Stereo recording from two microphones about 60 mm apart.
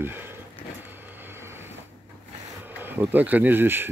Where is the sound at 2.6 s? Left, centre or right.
Right.